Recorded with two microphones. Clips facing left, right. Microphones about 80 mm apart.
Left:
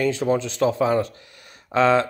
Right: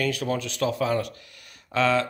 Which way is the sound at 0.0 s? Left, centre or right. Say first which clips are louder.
Left 5 dB; left.